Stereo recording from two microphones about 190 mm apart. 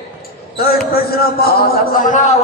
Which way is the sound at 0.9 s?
55° left (ahead or behind).